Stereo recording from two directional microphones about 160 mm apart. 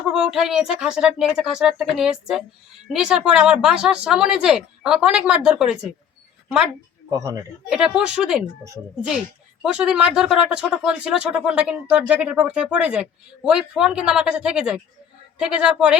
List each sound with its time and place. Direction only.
0.1 s speech: 5° right (ahead or behind)
7.1 s a man's voice: 20° right (ahead or behind)
7.7 s speech: 5° right (ahead or behind)
9.7 s speech: 5° right (ahead or behind)